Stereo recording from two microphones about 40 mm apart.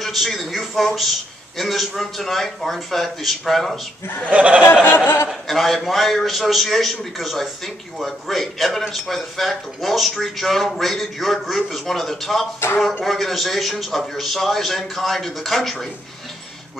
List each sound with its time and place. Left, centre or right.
0.0 s a man's voice: centre
4.3 s a sound: right
4.8 s speech: left
5.3 s a man's voice: centre